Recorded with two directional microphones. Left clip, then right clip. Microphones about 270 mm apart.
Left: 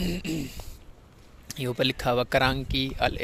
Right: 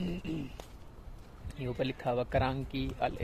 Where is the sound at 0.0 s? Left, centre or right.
Left.